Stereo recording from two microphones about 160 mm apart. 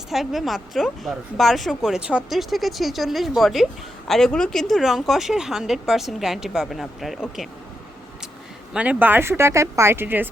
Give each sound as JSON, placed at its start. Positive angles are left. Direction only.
{"t": 0.1, "sound": "a woman's voice", "side_deg": 0}
{"t": 8.7, "sound": "speech", "side_deg": -10}